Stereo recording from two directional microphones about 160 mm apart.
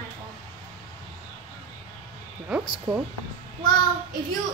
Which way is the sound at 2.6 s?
25° right (ahead or behind).